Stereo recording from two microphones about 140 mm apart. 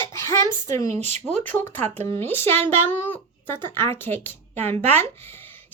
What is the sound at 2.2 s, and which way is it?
A woman's voice, 15° left (ahead or behind).